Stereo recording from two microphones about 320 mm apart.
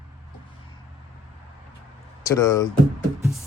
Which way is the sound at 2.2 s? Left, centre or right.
Centre.